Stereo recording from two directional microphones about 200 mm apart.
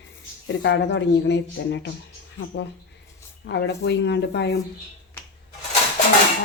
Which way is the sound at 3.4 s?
55° left (ahead or behind).